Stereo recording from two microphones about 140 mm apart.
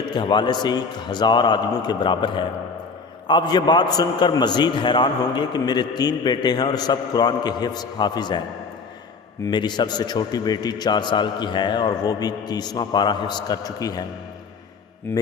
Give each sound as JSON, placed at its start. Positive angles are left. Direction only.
{"t": 0.1, "sound": "a man's voice", "side_deg": 30}
{"t": 9.5, "sound": "a man's voice", "side_deg": 30}